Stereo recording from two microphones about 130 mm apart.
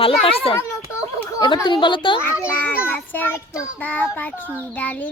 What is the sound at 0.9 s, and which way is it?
Children playing, 25° left (ahead or behind).